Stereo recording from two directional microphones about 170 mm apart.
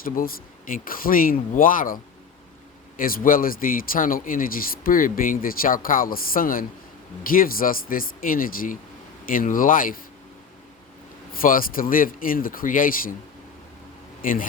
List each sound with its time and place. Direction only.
0.0 s speech: 60° left (ahead or behind)
3.0 s speech: 55° left (ahead or behind)
11.3 s speech: 55° left (ahead or behind)
14.2 s speech: 55° left (ahead or behind)